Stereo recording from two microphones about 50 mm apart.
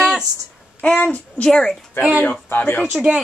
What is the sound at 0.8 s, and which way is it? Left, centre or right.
Speech, left.